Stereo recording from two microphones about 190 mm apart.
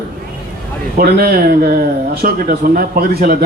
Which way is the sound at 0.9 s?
50° right (ahead or behind).